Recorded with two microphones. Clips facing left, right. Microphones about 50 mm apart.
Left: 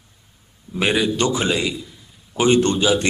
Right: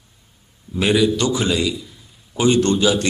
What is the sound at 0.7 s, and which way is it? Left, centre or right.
A man's voice, left.